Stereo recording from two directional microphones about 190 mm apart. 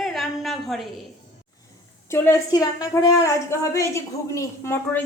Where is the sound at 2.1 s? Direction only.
15° left (ahead or behind).